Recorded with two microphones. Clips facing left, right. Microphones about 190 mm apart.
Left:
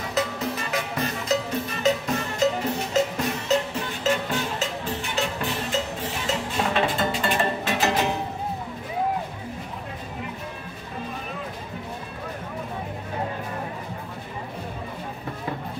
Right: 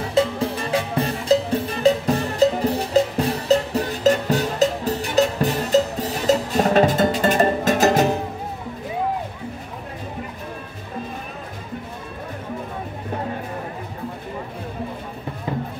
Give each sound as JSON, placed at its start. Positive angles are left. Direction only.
{"t": 0.1, "sound": "music", "side_deg": -30}